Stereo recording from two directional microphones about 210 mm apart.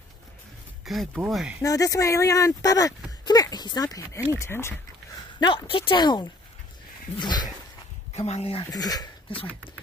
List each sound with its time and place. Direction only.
0.8 s speech: centre (ahead or behind)
1.6 s speech: 15° left (ahead or behind)
5.4 s speech: 25° left (ahead or behind)
7.2 s dog: 20° left (ahead or behind)
8.2 s speech: 30° left (ahead or behind)